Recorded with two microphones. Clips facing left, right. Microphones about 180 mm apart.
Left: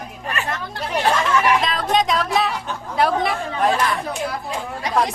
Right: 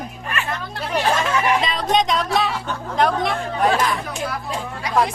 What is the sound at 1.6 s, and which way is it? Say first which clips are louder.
Speech: even; centre (ahead or behind).